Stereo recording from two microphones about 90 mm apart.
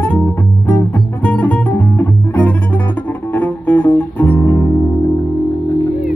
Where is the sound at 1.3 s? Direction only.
15° left (ahead or behind).